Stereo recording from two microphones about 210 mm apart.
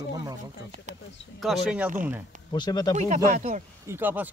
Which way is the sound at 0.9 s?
35° right (ahead or behind).